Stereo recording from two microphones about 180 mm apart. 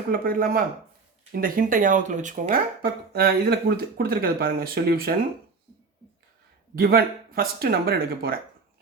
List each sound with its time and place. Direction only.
0.1 s speech: 50° right (ahead or behind)
6.7 s speech: 55° right (ahead or behind)